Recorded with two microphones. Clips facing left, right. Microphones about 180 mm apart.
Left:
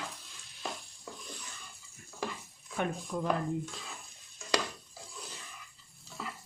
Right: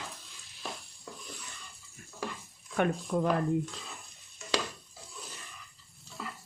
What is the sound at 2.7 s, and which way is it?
Speech, 65° right (ahead or behind).